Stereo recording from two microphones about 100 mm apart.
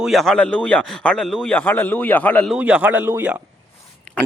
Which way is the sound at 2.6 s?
15° right (ahead or behind).